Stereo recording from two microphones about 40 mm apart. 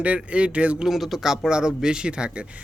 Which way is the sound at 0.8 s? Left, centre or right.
Centre.